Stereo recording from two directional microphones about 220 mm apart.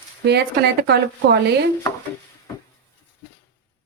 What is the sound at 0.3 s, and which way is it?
A woman's voice, 50° right (ahead or behind).